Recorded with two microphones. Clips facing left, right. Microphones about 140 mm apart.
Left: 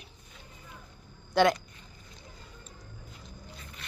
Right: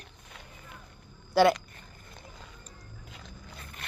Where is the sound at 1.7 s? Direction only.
55° right (ahead or behind).